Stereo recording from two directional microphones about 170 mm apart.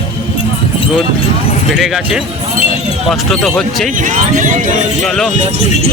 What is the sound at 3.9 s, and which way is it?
Speech, 50° right (ahead or behind).